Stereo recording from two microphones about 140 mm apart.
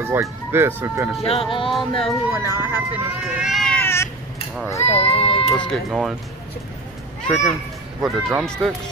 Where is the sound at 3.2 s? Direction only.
Centre (ahead or behind).